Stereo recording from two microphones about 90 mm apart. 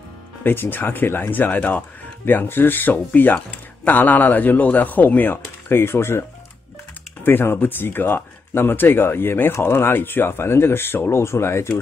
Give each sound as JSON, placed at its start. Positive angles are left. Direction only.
{"t": 0.4, "sound": "speech", "side_deg": 20}
{"t": 7.2, "sound": "speech", "side_deg": 25}